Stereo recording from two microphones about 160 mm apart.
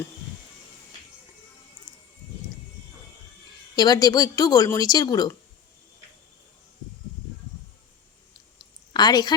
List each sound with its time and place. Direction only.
3.8 s speech: 25° left (ahead or behind)
8.9 s a woman's voice: 25° left (ahead or behind)